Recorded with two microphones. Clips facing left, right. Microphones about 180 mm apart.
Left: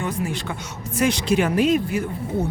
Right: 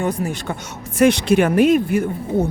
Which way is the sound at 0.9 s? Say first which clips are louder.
Right 6 dB; 60° right (ahead or behind).